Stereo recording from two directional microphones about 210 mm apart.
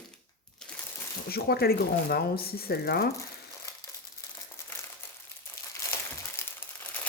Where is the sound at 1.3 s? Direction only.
50° left (ahead or behind).